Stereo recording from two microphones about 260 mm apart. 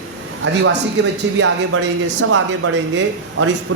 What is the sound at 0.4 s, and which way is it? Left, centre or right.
Speech, right.